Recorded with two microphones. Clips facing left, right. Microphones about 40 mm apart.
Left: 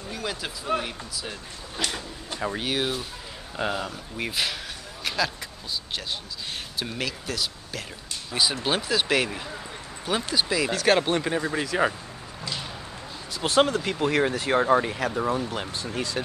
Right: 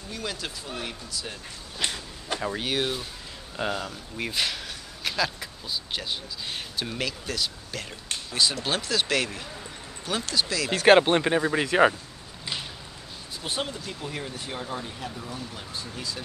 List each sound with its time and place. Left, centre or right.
0.1 s speech: centre
1.8 s speech: centre
6.8 s speech: centre
8.3 s speech: centre
10.7 s speech: right
13.3 s speech: left